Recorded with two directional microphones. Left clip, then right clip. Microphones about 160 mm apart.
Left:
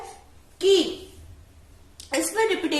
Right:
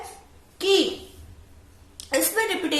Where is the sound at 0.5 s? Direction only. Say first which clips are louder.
Left 2 dB; 40° right (ahead or behind).